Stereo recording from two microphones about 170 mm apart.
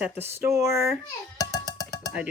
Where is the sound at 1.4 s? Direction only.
20° left (ahead or behind).